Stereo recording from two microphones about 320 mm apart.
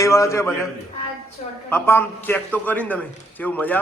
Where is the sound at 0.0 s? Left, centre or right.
Centre.